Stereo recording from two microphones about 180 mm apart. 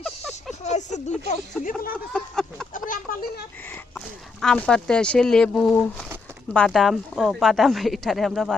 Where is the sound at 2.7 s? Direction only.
50° left (ahead or behind).